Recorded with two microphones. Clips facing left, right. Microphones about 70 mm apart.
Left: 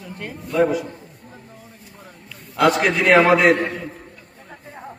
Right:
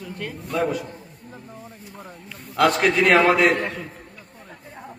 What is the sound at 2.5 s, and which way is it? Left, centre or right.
Speech, centre.